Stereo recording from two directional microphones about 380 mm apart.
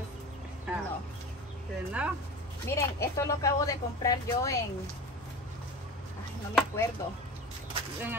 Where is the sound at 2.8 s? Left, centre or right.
Centre.